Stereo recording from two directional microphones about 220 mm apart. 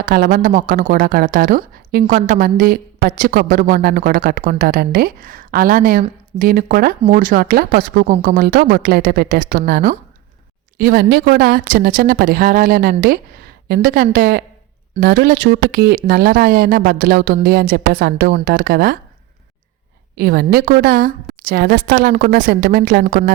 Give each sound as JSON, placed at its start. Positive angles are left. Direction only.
{"t": 0.0, "sound": "a woman's voice", "side_deg": -40}
{"t": 20.1, "sound": "a woman's voice", "side_deg": -45}